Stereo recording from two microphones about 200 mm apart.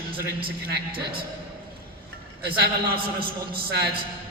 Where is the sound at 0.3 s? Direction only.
50° right (ahead or behind).